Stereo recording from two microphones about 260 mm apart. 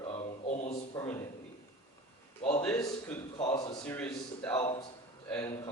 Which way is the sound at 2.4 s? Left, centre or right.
Left.